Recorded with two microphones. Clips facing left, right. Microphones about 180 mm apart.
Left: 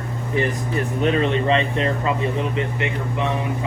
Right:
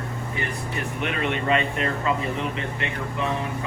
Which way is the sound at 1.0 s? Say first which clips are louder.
Left 6 dB; 30° left (ahead or behind).